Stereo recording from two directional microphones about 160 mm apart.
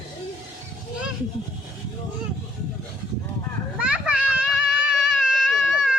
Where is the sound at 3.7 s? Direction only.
5° right (ahead or behind).